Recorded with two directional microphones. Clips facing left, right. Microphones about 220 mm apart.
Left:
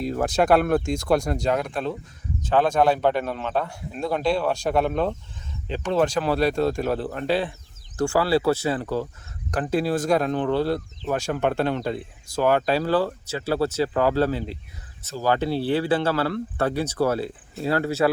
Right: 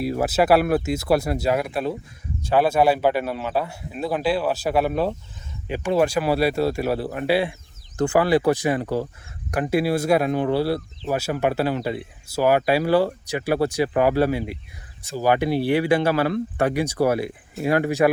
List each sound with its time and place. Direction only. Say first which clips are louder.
0.0 s speech: right 2 dB; 10° right (ahead or behind)